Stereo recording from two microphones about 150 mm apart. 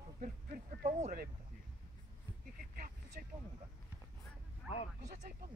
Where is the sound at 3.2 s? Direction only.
70° right (ahead or behind).